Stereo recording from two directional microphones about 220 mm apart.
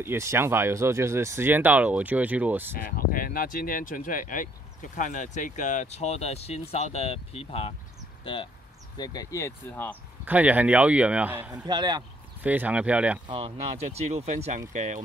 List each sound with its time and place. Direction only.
0.0 s speech: 10° right (ahead or behind)
2.8 s speech: 40° left (ahead or behind)
8.9 s speech: 20° left (ahead or behind)
10.2 s speech: 5° right (ahead or behind)
12.4 s speech: 5° right (ahead or behind)
13.3 s speech: 30° right (ahead or behind)